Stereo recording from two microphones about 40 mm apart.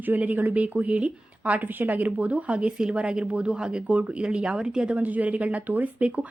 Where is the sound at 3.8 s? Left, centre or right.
Right.